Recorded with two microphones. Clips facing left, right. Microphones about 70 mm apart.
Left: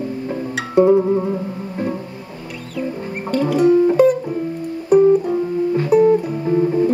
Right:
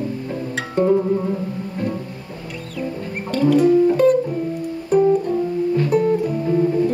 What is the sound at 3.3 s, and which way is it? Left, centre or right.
Music, centre.